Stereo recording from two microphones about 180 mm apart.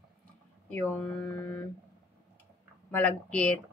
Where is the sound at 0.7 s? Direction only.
10° left (ahead or behind).